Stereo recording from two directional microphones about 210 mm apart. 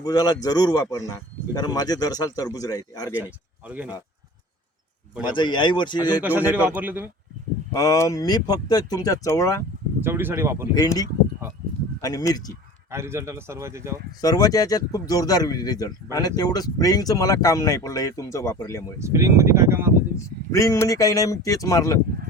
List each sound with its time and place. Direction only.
0.0 s speech: 20° left (ahead or behind)
3.1 s speech: 5° right (ahead or behind)
5.2 s a man's voice: 20° left (ahead or behind)
6.2 s speech: 10° right (ahead or behind)
7.7 s speech: 15° left (ahead or behind)
10.0 s speech: 10° right (ahead or behind)
10.8 s speech: 15° left (ahead or behind)
12.0 s speech: 15° left (ahead or behind)
12.9 s speech: 10° right (ahead or behind)
14.2 s speech: 15° left (ahead or behind)
18.9 s speech: 15° right (ahead or behind)
20.5 s speech: 15° left (ahead or behind)